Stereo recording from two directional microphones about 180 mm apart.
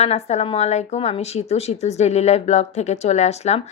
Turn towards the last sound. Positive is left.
turn(degrees=35)  # may be behind; listen again after turning